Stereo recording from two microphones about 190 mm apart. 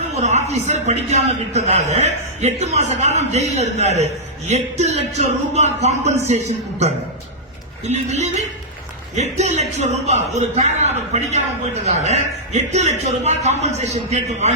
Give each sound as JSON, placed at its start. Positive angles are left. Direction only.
{"t": 0.1, "sound": "a man's voice", "side_deg": -35}